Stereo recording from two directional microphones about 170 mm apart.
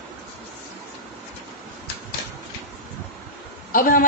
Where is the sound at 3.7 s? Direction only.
55° left (ahead or behind).